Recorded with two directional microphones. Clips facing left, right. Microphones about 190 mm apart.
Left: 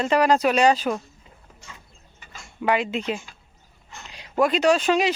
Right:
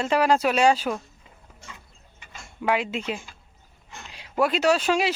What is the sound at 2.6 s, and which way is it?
Speech, centre (ahead or behind).